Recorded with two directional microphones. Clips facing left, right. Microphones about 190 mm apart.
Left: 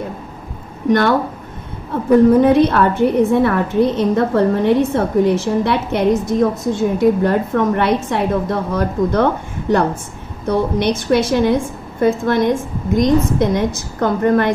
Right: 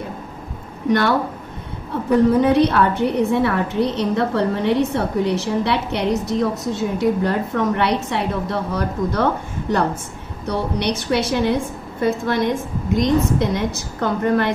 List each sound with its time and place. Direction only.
0.8 s a woman's voice: 50° left (ahead or behind)
2.4 s a woman's voice: 50° left (ahead or behind)
10.4 s a woman's voice: 50° left (ahead or behind)